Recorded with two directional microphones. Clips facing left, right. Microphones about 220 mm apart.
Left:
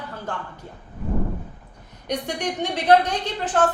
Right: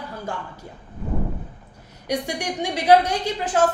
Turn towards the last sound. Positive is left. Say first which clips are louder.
# right 1 dB
turn(degrees=-10)  # may be behind; listen again after turning